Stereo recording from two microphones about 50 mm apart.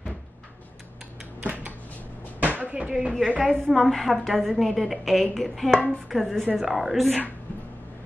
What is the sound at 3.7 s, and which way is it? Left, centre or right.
A woman's voice, centre.